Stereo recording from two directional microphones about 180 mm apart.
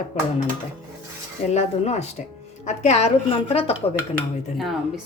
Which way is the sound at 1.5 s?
40° left (ahead or behind).